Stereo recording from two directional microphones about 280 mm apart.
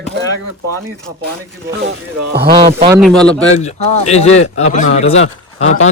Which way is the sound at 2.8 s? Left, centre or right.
Centre.